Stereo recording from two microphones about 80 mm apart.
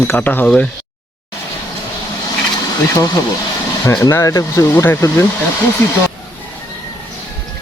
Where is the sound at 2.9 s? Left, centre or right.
Left.